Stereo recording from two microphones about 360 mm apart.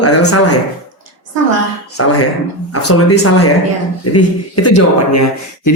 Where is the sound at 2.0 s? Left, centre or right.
Left.